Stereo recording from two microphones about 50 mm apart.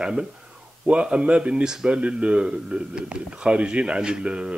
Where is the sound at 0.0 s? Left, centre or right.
Centre.